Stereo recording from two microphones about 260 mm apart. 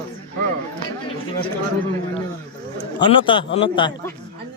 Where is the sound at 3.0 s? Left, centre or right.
Centre.